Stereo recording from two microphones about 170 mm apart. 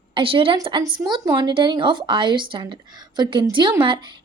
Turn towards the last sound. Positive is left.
turn(degrees=-30)  # may be behind; listen again after turning